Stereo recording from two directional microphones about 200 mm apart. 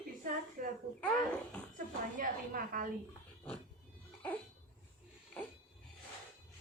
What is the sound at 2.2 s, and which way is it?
Speech, 45° right (ahead or behind).